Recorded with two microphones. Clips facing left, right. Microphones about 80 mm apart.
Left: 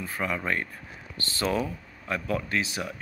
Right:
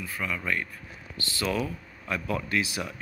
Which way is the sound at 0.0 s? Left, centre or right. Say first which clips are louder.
Left 2 dB; left.